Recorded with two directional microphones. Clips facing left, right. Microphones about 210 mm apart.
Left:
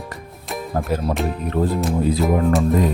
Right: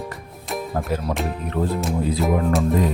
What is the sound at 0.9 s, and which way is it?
Speech, 40° left (ahead or behind).